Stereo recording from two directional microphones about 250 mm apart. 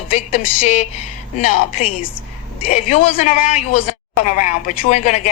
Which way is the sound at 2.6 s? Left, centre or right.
Left.